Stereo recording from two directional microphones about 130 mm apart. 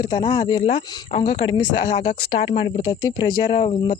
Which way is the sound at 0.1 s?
35° left (ahead or behind).